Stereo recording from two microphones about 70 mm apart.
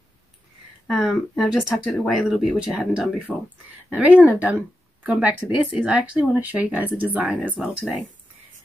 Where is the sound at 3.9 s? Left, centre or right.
Centre.